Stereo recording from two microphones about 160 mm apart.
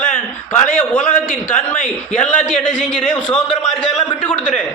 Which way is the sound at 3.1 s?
5° left (ahead or behind).